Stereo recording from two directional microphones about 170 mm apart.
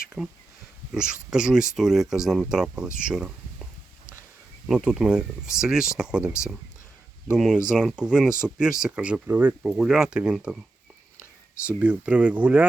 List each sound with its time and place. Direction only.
0.2 s speech: 5° left (ahead or behind)
3.1 s a sound: 5° right (ahead or behind)
4.6 s speech: 5° right (ahead or behind)
7.3 s speech: centre (ahead or behind)
11.6 s speech: 10° right (ahead or behind)